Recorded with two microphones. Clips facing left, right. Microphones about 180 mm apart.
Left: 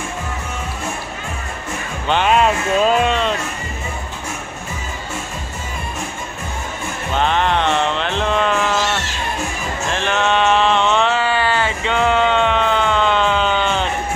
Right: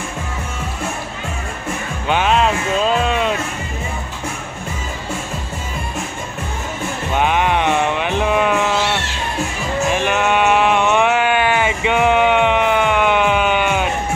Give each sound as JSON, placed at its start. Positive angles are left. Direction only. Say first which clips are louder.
{"t": 2.0, "sound": "music", "louder": "left 1 dB", "side_deg": -5}
{"t": 7.2, "sound": "sheep", "louder": "right 1 dB", "side_deg": -10}